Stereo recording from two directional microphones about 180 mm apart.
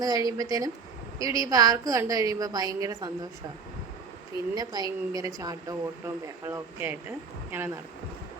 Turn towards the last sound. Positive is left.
turn(degrees=-10)  # may be behind; listen again after turning